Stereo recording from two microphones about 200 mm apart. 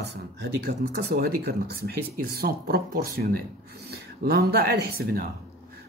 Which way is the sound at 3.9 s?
55° right (ahead or behind).